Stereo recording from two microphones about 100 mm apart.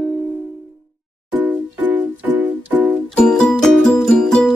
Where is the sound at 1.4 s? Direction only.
15° right (ahead or behind).